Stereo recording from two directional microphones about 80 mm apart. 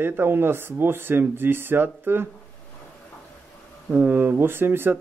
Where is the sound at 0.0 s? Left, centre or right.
Right.